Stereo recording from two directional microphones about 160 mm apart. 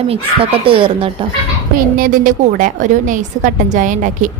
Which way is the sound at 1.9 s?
60° right (ahead or behind).